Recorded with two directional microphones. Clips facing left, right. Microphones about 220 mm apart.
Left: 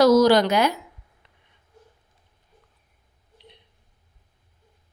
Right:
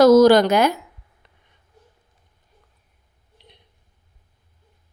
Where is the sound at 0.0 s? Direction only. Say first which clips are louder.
Right 4 dB; 50° right (ahead or behind).